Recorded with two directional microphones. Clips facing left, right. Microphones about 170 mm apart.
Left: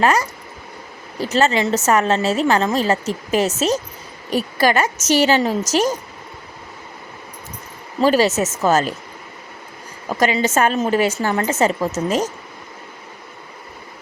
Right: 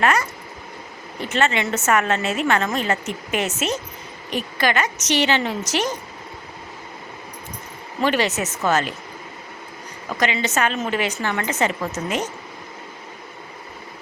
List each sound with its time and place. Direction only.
0.0 s a woman's voice: 35° left (ahead or behind)
8.0 s a woman's voice: 40° left (ahead or behind)
10.2 s a woman's voice: 45° left (ahead or behind)